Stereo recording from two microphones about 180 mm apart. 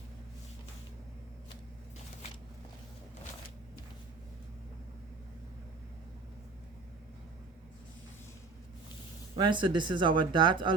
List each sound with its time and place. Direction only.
9.4 s speech: 25° right (ahead or behind)